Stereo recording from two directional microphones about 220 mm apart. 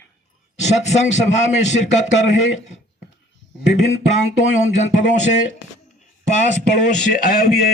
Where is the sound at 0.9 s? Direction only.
30° left (ahead or behind).